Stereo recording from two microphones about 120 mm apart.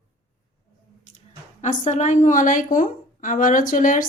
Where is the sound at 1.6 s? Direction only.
85° left.